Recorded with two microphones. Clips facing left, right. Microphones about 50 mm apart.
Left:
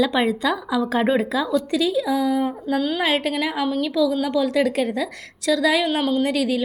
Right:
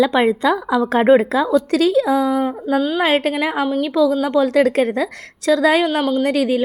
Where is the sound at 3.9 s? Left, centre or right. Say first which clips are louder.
Right 6 dB; right.